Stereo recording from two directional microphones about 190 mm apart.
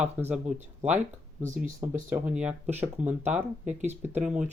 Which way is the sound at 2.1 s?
5° right (ahead or behind).